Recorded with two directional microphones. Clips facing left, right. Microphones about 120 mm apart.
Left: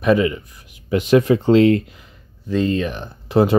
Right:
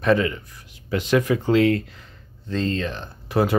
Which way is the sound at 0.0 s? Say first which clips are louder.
Left 3 dB; 15° left (ahead or behind).